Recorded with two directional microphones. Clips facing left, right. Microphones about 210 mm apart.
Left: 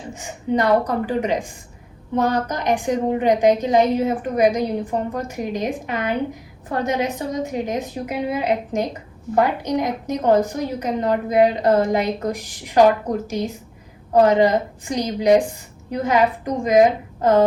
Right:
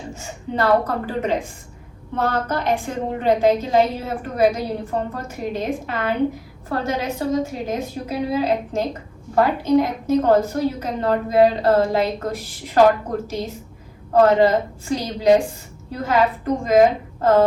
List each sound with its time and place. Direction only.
0.1 s a woman's voice: 15° left (ahead or behind)
14.1 s a woman's voice: 15° left (ahead or behind)